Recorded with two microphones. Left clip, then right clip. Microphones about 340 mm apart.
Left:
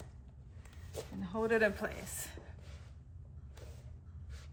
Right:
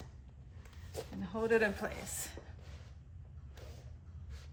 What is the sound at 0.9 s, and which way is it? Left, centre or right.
Speech, centre.